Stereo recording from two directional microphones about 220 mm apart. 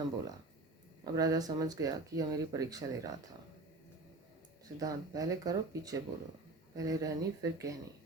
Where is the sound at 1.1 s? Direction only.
15° right (ahead or behind).